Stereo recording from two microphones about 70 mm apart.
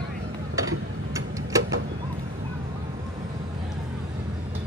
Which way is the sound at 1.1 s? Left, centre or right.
Right.